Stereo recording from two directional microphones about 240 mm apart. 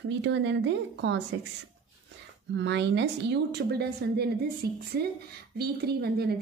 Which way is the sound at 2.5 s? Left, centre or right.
Right.